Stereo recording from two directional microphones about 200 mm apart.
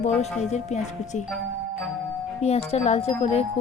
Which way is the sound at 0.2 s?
35° left (ahead or behind).